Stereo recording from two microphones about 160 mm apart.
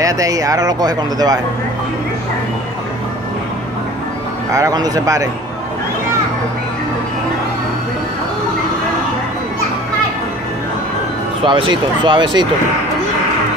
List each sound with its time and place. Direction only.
0.0 s speech: 20° right (ahead or behind)
4.5 s speech: 20° right (ahead or behind)
11.4 s speech: 30° right (ahead or behind)